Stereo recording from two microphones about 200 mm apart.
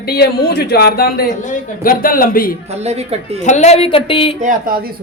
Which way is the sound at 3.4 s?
35° left (ahead or behind).